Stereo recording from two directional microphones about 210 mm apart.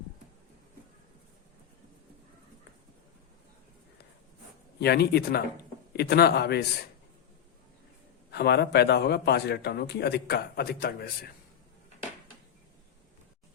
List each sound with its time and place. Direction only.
4.8 s a man's voice: 50° left (ahead or behind)
8.3 s a man's voice: 50° left (ahead or behind)